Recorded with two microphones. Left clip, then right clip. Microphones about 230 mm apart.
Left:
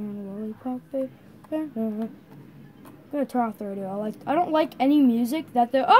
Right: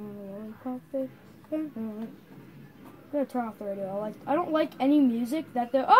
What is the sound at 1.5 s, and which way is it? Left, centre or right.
Speech, left.